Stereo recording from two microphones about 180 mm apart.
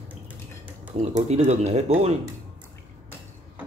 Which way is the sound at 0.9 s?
40° right (ahead or behind).